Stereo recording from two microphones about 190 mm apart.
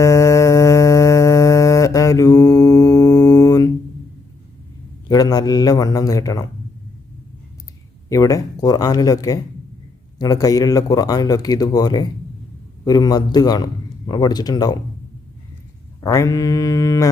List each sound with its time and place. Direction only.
0.0 s music: 15° left (ahead or behind)
5.0 s speech: 20° left (ahead or behind)
8.1 s speech: 20° left (ahead or behind)
16.0 s mantra: 15° left (ahead or behind)